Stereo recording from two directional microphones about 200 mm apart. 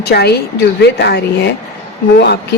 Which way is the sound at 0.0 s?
55° left (ahead or behind).